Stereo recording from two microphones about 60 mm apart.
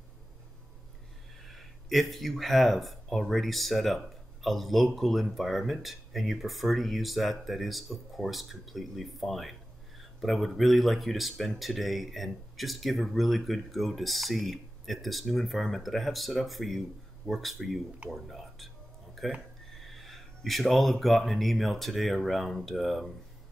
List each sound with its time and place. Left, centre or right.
1.4 s speech: centre
19.2 s a sound: centre
19.8 s speech: centre